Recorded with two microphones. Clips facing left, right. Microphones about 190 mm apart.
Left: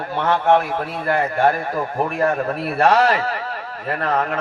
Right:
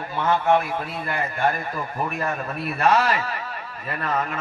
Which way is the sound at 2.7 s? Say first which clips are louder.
Left 4 dB; 70° left (ahead or behind).